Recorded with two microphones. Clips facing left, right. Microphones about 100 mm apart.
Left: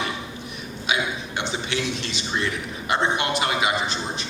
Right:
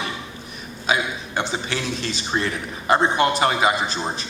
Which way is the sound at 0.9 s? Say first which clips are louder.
Right 3 dB; 40° right (ahead or behind).